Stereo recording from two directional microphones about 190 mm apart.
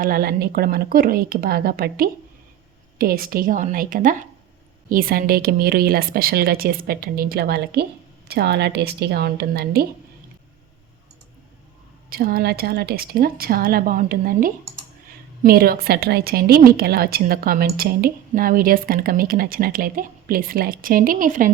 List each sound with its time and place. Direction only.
0.0 s a woman's voice: 50° right (ahead or behind)
12.1 s a woman's voice: 55° right (ahead or behind)